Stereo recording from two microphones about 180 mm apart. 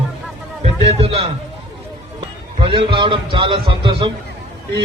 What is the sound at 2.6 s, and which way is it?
A man's voice, 30° right (ahead or behind).